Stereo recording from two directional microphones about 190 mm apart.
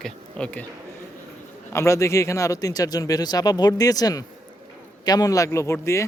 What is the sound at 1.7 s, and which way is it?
Speech, 15° left (ahead or behind).